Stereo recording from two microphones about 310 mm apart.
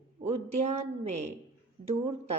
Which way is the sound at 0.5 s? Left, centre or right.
Right.